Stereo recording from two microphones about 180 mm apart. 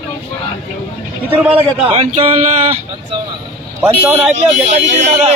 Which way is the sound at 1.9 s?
30° right (ahead or behind).